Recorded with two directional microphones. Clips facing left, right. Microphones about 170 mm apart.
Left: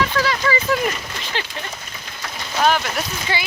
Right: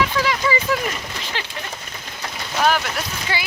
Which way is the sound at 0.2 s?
15° right (ahead or behind).